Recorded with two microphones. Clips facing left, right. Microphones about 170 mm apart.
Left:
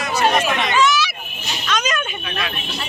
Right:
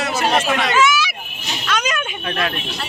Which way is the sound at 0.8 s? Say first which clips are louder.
Right 1 dB; 10° right (ahead or behind).